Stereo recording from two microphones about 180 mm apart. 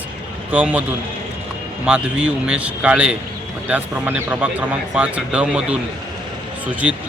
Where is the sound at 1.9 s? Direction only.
5° right (ahead or behind).